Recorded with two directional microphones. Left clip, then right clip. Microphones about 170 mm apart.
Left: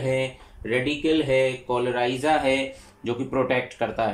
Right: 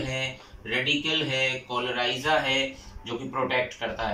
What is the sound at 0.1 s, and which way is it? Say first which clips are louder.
Speech: left 5 dB; 60° left (ahead or behind).